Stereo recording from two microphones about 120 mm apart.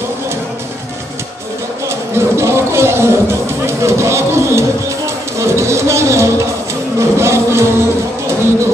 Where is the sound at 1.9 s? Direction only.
20° right (ahead or behind).